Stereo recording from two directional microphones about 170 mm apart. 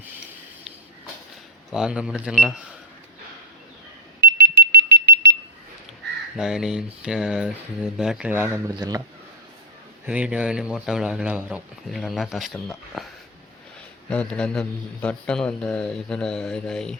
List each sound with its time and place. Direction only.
1.7 s speech: 5° right (ahead or behind)
4.2 s alarm: 70° right (ahead or behind)
4.6 s smoke detector: 70° right (ahead or behind); by 5.4 s 85° right
6.3 s speech: 5° right (ahead or behind); by 9.0 s 20° right (ahead or behind)
10.1 s speech: 5° right (ahead or behind)
14.1 s speech: 5° left (ahead or behind)